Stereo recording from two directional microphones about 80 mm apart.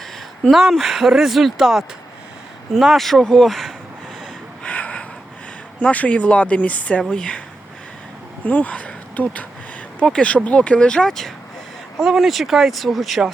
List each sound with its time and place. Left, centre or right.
0.5 s speech: centre
4.6 s a sound: centre
5.8 s speech: centre
8.4 s speech: centre